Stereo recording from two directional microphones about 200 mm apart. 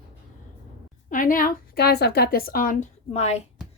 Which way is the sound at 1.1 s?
40° left (ahead or behind).